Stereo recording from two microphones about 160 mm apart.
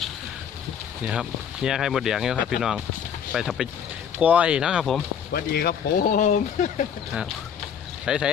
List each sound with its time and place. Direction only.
1.0 s speech: 5° right (ahead or behind)
5.3 s speech: 75° left (ahead or behind); by 6.8 s 50° left (ahead or behind)
8.0 s speech: 5° right (ahead or behind)